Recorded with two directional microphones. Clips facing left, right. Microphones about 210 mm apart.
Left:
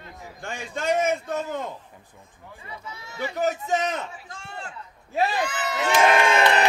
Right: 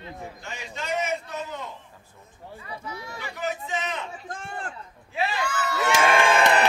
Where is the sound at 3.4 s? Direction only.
45° left (ahead or behind).